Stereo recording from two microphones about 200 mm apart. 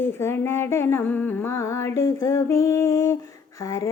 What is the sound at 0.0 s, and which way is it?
Speech, 10° left (ahead or behind).